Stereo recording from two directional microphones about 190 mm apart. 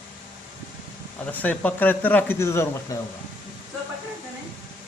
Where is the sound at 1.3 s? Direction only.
10° left (ahead or behind).